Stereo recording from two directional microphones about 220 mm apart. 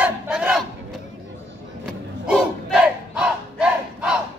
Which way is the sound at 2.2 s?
5° right (ahead or behind).